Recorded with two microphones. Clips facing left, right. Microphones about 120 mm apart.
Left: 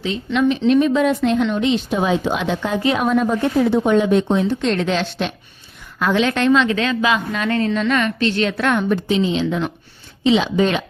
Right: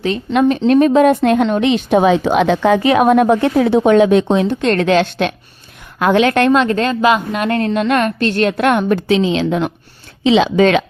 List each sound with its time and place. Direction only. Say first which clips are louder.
0.3 s a woman's voice: right 3 dB; 45° right (ahead or behind); by 9.7 s 65° right (ahead or behind)
10.2 s speech: right 5 dB; 90° right